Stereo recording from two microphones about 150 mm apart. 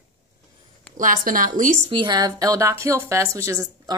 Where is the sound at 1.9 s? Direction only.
30° right (ahead or behind).